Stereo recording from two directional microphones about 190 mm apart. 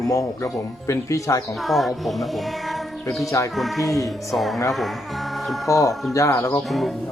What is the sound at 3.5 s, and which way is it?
Music, centre (ahead or behind).